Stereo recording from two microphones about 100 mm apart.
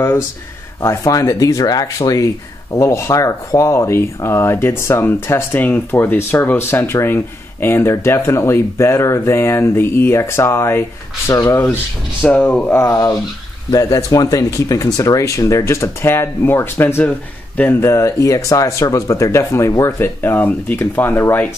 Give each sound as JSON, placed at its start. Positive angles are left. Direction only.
{"t": 0.7, "sound": "speech", "side_deg": 35}
{"t": 12.7, "sound": "speech", "side_deg": 35}